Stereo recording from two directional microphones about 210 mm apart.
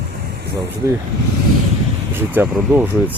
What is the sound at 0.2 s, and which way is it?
Vehicle, 50° right (ahead or behind).